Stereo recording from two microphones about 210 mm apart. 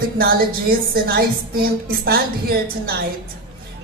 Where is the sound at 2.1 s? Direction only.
45° right (ahead or behind).